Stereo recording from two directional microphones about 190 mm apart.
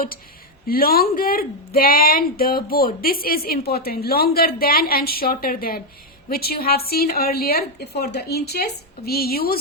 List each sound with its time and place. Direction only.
0.7 s speech: 50° left (ahead or behind)